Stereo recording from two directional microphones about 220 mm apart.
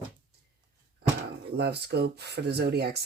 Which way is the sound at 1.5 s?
50° right (ahead or behind).